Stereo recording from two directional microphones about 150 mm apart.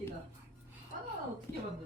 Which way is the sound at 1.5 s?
20° left (ahead or behind).